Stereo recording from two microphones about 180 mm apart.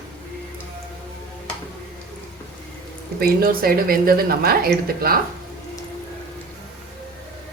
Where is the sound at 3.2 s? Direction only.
55° right (ahead or behind).